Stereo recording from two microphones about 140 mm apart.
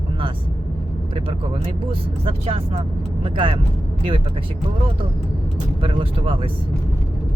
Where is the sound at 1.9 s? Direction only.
45° right (ahead or behind).